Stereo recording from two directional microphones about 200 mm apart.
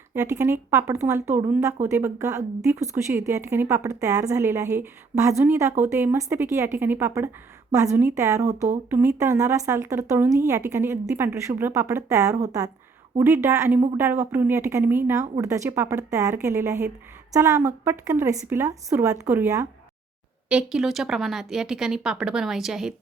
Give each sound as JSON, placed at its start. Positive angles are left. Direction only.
{"t": 0.1, "sound": "speech", "side_deg": -10}